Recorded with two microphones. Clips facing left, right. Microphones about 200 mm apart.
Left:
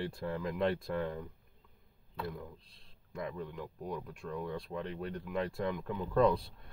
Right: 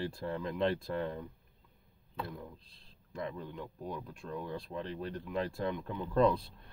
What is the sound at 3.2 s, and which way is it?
Speech, 30° right (ahead or behind).